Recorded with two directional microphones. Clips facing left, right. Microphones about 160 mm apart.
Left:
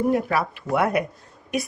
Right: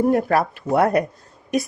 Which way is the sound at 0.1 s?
50° right (ahead or behind).